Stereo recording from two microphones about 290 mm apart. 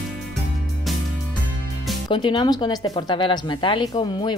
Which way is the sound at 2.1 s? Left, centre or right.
Centre.